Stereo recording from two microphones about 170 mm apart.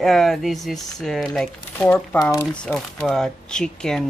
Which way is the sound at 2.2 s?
20° left (ahead or behind).